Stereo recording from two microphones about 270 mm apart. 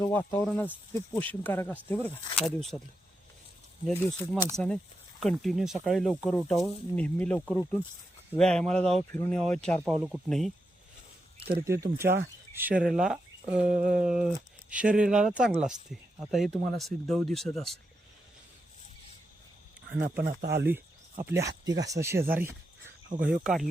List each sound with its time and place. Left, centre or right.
0.0 s speech: centre
3.8 s speech: centre
11.5 s speech: centre
20.1 s speech: right
21.2 s speech: centre